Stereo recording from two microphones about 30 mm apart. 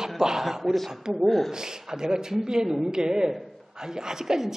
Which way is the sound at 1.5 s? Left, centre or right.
Right.